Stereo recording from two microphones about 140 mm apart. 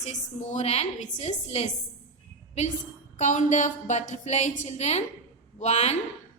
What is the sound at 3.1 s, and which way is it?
A woman's voice, 65° left (ahead or behind).